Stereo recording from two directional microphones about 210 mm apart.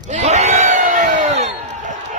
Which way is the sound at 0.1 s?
35° right (ahead or behind).